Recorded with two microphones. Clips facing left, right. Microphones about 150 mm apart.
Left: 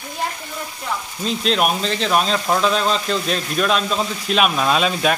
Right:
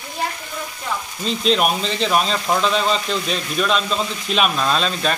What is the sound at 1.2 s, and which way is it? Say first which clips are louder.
Speech: right 1 dB; centre (ahead or behind).